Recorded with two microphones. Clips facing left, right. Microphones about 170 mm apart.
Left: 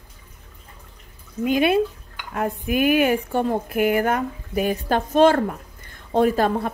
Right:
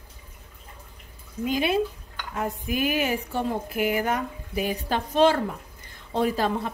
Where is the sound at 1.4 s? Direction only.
60° left (ahead or behind).